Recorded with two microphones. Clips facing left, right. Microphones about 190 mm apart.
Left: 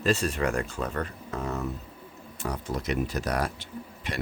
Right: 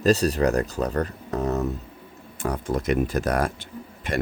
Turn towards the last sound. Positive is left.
turn(degrees=-50)  # may be behind; listen again after turning